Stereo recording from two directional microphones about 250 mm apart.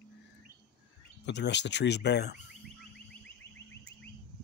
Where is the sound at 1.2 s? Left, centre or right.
Left.